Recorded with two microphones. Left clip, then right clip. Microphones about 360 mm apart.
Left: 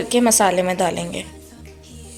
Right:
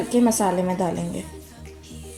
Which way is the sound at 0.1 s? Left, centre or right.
Left.